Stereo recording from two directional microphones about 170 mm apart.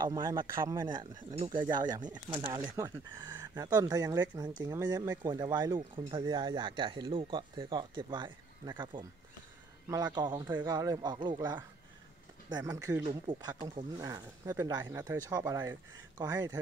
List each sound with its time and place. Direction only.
0.0 s speech: 25° right (ahead or behind)